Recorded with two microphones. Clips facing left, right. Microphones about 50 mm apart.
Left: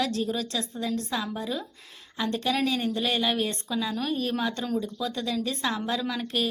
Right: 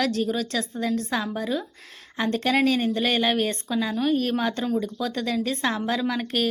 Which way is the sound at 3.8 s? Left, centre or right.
Right.